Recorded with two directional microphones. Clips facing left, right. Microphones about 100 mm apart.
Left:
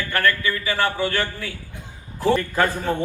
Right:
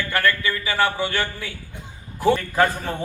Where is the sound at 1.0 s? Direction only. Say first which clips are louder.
Left 1 dB; 15° right (ahead or behind).